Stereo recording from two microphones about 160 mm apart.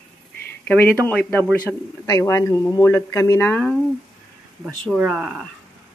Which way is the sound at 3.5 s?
5° left (ahead or behind).